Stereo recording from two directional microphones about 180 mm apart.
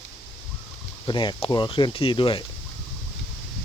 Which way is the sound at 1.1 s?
25° left (ahead or behind).